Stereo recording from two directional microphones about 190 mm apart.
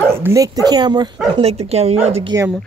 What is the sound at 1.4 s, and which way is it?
Speech, 35° right (ahead or behind).